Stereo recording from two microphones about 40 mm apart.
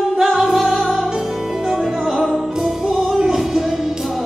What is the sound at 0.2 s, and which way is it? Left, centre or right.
Music, centre.